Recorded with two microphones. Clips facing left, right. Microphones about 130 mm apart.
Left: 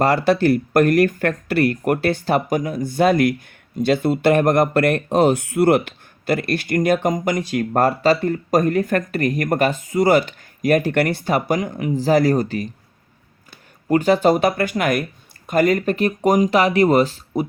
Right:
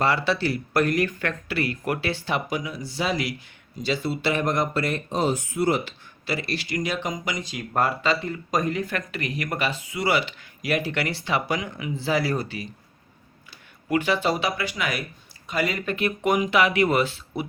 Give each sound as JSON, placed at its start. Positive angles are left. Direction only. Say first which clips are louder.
{"t": 0.0, "sound": "speech", "louder": "left 7 dB", "side_deg": 45}
{"t": 13.8, "sound": "speech", "louder": "left 8 dB", "side_deg": 40}